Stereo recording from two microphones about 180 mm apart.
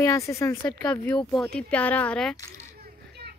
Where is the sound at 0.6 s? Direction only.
5° left (ahead or behind).